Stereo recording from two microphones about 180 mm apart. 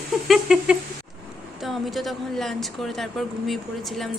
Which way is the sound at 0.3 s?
5° right (ahead or behind).